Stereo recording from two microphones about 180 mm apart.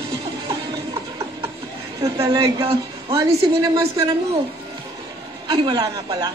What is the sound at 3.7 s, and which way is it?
Speech, 20° right (ahead or behind).